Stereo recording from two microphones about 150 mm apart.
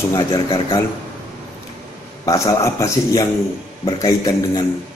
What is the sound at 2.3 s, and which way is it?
A man's voice, 20° left (ahead or behind).